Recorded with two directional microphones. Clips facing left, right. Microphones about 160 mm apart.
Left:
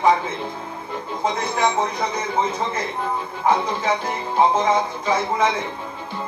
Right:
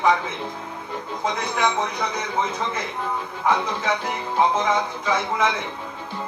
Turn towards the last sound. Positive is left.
turn(degrees=35)  # may be behind; listen again after turning